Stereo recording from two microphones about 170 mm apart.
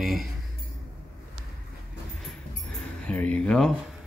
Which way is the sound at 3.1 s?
5° left (ahead or behind).